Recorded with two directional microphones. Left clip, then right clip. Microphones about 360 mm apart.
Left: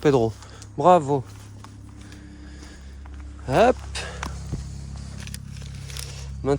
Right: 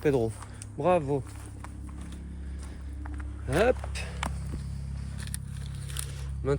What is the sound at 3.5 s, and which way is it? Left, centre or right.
Speech, centre.